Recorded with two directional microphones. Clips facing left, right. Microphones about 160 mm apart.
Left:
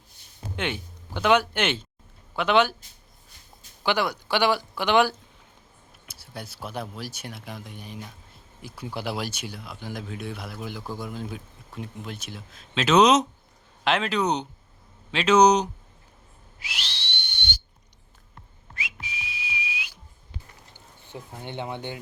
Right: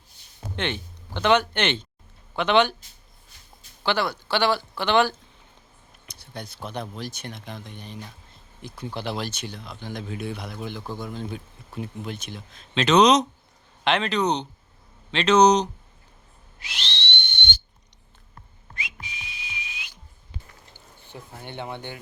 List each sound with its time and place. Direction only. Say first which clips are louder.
0.5 s speech: right 1 dB; 5° left (ahead or behind)
3.8 s speech: even; 15° left (ahead or behind)
16.6 s whistle: right 3 dB; 10° left (ahead or behind)
18.7 s whistling: left 1 dB; 5° left (ahead or behind)
21.1 s speech: left 2 dB; 15° left (ahead or behind)